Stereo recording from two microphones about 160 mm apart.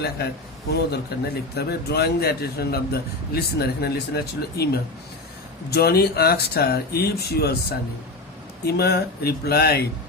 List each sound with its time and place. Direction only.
0.2 s speech: 80° left
8.6 s speech: 85° left